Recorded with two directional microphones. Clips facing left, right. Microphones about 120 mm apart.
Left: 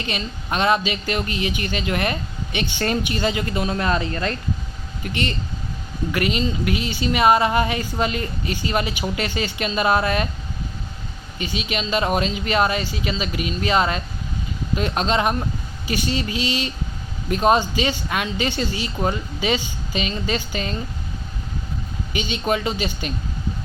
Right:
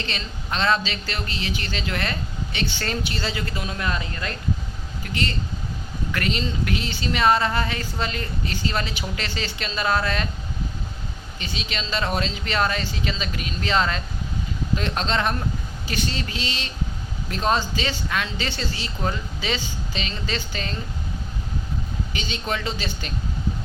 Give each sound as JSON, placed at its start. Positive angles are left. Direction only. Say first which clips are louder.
{"t": 0.0, "sound": "speech", "louder": "left 4 dB", "side_deg": 15}
{"t": 3.7, "sound": "speech", "louder": "left 6 dB", "side_deg": 35}
{"t": 5.0, "sound": "speech", "louder": "left 2 dB", "side_deg": 20}
{"t": 11.3, "sound": "speech", "louder": "left 6 dB", "side_deg": 15}
{"t": 22.1, "sound": "speech", "louder": "left 7 dB", "side_deg": 15}